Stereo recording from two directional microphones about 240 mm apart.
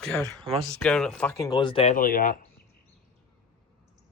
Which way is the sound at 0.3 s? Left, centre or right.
Right.